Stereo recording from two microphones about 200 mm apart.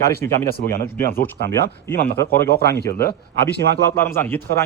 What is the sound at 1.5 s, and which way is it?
Speech, 15° left (ahead or behind).